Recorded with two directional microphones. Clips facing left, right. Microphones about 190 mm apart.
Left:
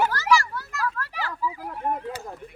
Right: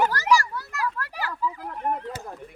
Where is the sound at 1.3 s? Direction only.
10° left (ahead or behind).